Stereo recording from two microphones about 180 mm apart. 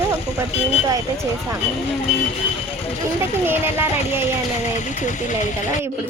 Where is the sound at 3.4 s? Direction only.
10° right (ahead or behind).